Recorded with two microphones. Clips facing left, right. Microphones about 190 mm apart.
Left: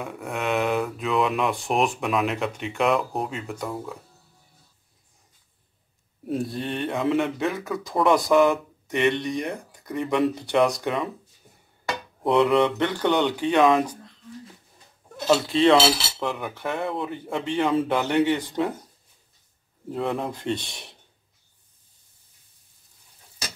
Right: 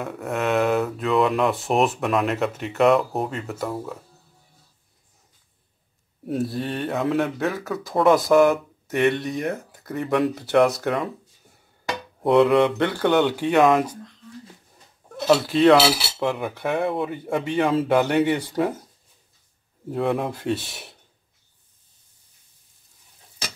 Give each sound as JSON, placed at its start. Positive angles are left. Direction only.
{"t": 0.0, "sound": "speech", "side_deg": 0}
{"t": 6.2, "sound": "speech", "side_deg": 0}
{"t": 12.6, "sound": "cutlery", "side_deg": -10}
{"t": 15.2, "sound": "cutlery", "side_deg": -5}
{"t": 19.9, "sound": "cutlery", "side_deg": -5}